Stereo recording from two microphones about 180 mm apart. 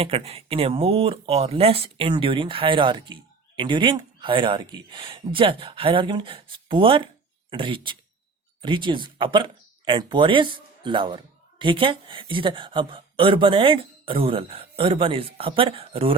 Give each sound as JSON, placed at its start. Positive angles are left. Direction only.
{"t": 0.0, "sound": "speech", "side_deg": -35}